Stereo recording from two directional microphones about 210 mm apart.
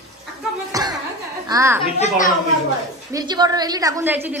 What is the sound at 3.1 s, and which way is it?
A man's voice, 20° right (ahead or behind).